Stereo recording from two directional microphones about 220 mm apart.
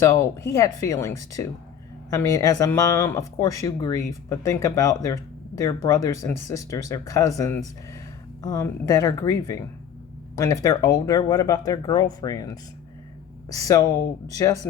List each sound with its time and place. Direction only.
0.0 s speech: 15° left (ahead or behind)